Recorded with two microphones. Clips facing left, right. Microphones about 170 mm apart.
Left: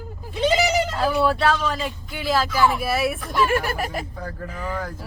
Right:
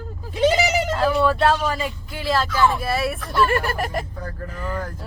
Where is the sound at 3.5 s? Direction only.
5° left (ahead or behind).